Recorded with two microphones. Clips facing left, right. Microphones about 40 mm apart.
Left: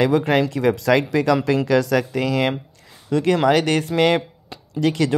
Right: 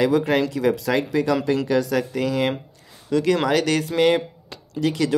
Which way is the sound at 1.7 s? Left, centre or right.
Left.